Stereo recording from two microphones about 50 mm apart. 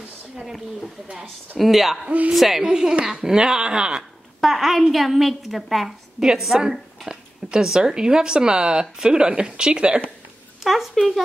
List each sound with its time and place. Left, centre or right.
0.4 s speech: centre
2.0 s music: right
2.3 s speech: centre
2.6 s a woman's voice: centre
4.4 s a woman's voice: centre; by 10.0 s right
10.6 s speech: centre